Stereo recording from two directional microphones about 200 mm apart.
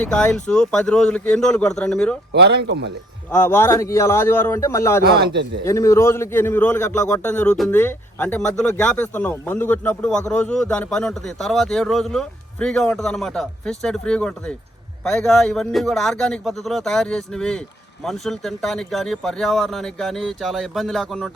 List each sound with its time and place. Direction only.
0.0 s a man's voice: 5° left (ahead or behind)
2.3 s speech: 55° right (ahead or behind)
3.3 s a man's voice: 10° left (ahead or behind)
5.0 s a man's voice: 50° right (ahead or behind)
5.6 s a man's voice: 15° left (ahead or behind)